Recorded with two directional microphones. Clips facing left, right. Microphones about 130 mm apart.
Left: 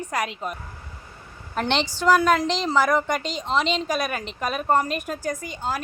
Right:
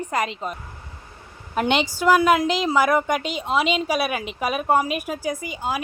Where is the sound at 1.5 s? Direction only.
10° right (ahead or behind).